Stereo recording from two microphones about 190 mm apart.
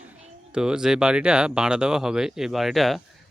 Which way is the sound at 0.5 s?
5° right (ahead or behind).